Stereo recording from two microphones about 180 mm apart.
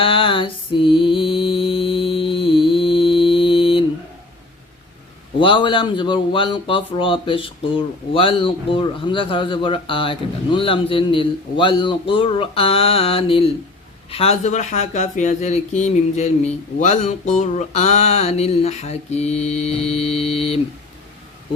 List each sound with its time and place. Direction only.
0.0 s mantra: 30° left (ahead or behind)
5.4 s speech: 30° left (ahead or behind)